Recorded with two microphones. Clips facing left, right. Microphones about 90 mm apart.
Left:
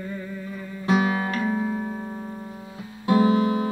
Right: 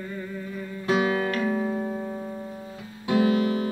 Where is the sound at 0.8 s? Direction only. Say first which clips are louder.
Left 1 dB; 25° left (ahead or behind).